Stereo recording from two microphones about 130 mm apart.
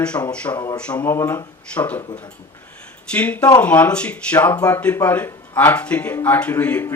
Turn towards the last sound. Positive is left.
turn(degrees=15)  # may be behind; listen again after turning